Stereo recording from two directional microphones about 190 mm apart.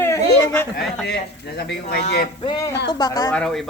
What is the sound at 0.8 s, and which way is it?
Speech, 65° left (ahead or behind).